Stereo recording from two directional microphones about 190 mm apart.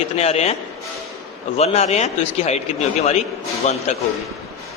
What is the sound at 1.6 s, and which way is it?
A man's voice, 35° left (ahead or behind).